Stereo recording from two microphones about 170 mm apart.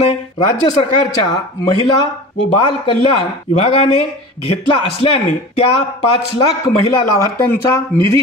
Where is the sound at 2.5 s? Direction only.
30° left (ahead or behind).